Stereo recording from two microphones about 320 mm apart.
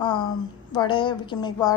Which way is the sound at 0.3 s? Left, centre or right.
Centre.